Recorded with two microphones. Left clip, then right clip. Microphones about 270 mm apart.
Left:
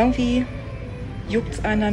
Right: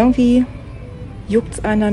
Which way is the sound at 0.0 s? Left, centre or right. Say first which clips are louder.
Right 6 dB; right.